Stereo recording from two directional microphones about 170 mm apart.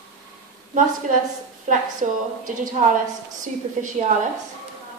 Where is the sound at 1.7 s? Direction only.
50° right (ahead or behind).